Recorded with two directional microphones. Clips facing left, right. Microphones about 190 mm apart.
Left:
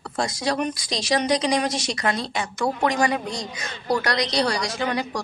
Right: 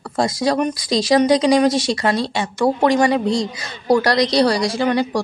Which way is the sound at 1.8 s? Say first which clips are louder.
Right 6 dB; 30° right (ahead or behind).